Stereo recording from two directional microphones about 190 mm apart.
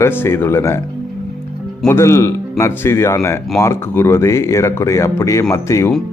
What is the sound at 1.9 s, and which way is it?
Speech, 15° left (ahead or behind).